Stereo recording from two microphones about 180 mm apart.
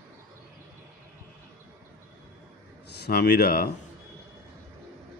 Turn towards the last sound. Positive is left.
turn(degrees=60)  # may be behind; listen again after turning